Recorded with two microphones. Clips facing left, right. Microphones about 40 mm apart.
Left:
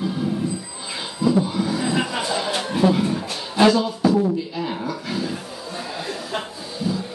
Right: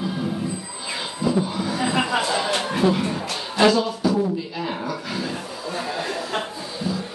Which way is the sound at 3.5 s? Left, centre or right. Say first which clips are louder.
Left 1 dB; centre.